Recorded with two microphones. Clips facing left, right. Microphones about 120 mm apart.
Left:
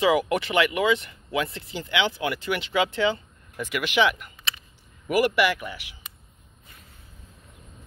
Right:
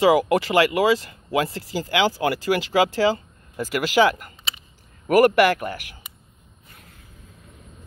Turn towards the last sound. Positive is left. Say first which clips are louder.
# right 5 dB
turn(degrees=-50)  # may be behind; listen again after turning